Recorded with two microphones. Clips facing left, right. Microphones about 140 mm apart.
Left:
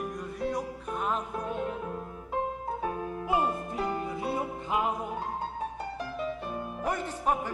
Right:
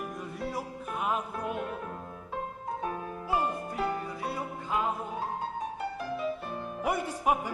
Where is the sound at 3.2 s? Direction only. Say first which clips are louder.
Left 2 dB; 20° left (ahead or behind).